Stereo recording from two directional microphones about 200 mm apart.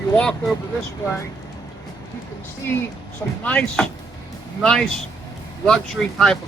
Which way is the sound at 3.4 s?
5° left (ahead or behind).